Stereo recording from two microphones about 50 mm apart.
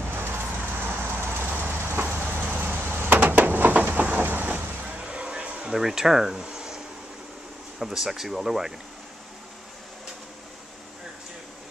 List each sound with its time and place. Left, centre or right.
0.0 s vehicle: right
1.4 s train: right
2.1 s vehicle: right
2.5 s chop: right
3.2 s a sound: right
4.2 s vehicle: right
4.5 s vehicle: right
5.0 s music: centre
5.7 s speech: centre
7.8 s speech: centre